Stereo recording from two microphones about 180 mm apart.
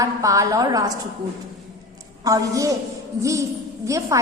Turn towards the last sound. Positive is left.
turn(degrees=-15)  # may be behind; listen again after turning